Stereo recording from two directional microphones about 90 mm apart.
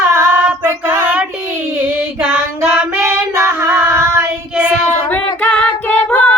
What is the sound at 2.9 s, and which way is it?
Child singing, 30° right (ahead or behind).